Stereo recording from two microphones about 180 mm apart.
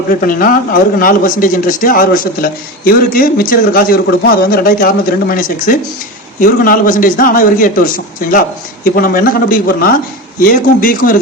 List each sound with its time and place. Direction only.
0.2 s speech: 50° left (ahead or behind)